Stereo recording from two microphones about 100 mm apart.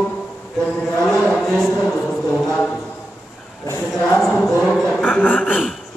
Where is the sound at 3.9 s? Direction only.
5° left (ahead or behind).